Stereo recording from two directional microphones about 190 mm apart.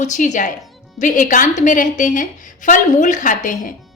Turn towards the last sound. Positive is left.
turn(degrees=40)  # may be behind; listen again after turning